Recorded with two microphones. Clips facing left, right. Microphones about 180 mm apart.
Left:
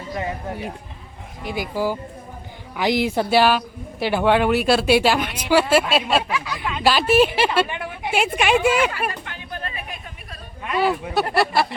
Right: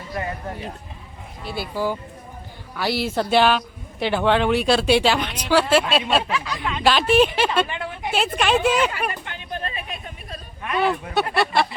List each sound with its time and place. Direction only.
0.1 s speech: 15° left (ahead or behind)
8.9 s a sound: 20° right (ahead or behind)
11.1 s speech: centre (ahead or behind)